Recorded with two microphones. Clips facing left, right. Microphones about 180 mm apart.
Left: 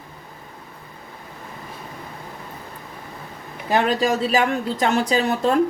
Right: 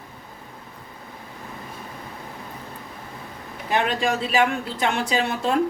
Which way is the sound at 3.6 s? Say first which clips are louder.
Left 3 dB; 35° left (ahead or behind).